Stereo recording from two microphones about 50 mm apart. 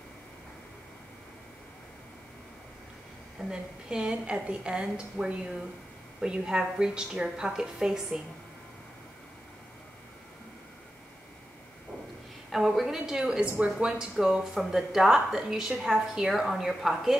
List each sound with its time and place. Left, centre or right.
3.4 s a woman's voice: centre
12.4 s a woman's voice: centre